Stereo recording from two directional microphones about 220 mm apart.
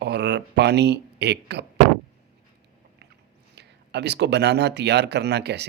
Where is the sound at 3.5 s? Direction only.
50° right (ahead or behind).